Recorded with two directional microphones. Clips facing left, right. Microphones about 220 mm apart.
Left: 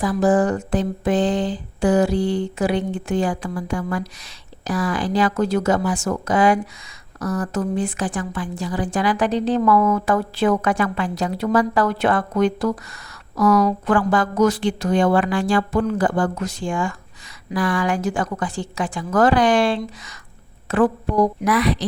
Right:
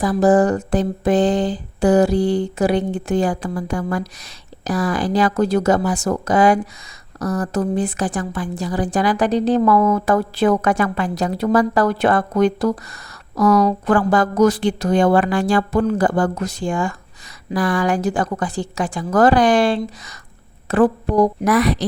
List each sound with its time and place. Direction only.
0.0 s a woman's voice: 40° right (ahead or behind)